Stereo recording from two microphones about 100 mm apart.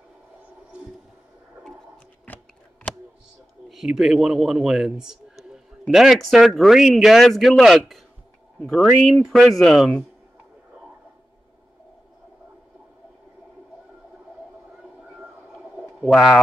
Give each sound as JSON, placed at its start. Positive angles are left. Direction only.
{"t": 2.2, "sound": "shuffling cards", "side_deg": 15}
{"t": 3.6, "sound": "a man's voice", "side_deg": 0}
{"t": 15.1, "sound": "a sound", "side_deg": -5}